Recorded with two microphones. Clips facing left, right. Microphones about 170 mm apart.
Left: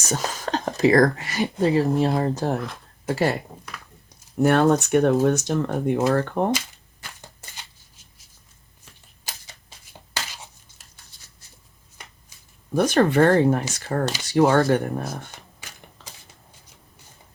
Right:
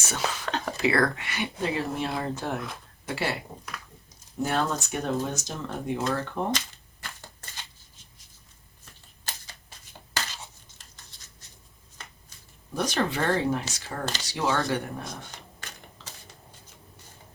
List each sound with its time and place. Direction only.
0.0 s speech: 40° left (ahead or behind)
4.4 s speech: 60° left (ahead or behind)
10.2 s a sound: 10° left (ahead or behind)
12.7 s speech: 55° left (ahead or behind)